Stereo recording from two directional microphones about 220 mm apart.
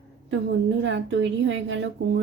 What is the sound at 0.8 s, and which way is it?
A woman's voice, 55° right (ahead or behind).